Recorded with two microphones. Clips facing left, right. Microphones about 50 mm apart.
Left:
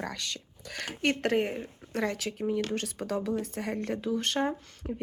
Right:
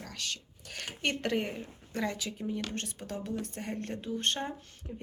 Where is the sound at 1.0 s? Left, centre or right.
Left.